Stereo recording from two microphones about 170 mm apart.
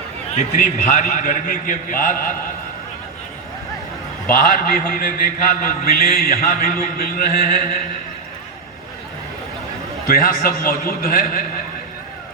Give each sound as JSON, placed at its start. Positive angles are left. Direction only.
{"t": 0.3, "sound": "a man's voice", "side_deg": 45}
{"t": 4.3, "sound": "a man's voice", "side_deg": 55}
{"t": 10.2, "sound": "a man's voice", "side_deg": 55}